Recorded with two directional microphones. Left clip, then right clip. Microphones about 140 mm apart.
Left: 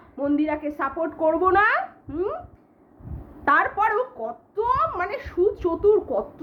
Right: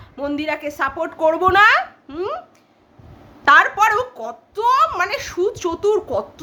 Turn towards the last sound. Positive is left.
turn(degrees=-20)  # may be behind; listen again after turning